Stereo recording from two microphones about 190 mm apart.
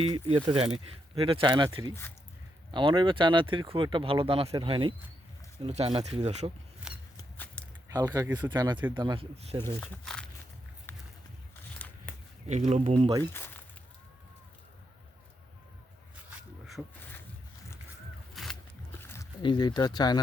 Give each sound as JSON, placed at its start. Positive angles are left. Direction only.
{"t": 0.0, "sound": "speech", "side_deg": -30}
{"t": 6.9, "sound": "scissors", "side_deg": -5}
{"t": 7.3, "sound": "a sound", "side_deg": 5}
{"t": 7.9, "sound": "speech", "side_deg": -20}
{"t": 9.6, "sound": "speech", "side_deg": 5}
{"t": 10.9, "sound": "horse", "side_deg": 10}
{"t": 12.5, "sound": "speech", "side_deg": -35}
{"t": 13.3, "sound": "speech", "side_deg": 10}
{"t": 16.1, "sound": "a sound", "side_deg": -5}
{"t": 18.4, "sound": "a sound", "side_deg": 0}
{"t": 18.9, "sound": "a sound", "side_deg": 15}
{"t": 19.4, "sound": "speech", "side_deg": 25}